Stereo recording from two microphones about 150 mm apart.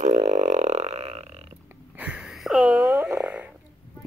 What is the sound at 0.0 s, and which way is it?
Burping, 50° right (ahead or behind).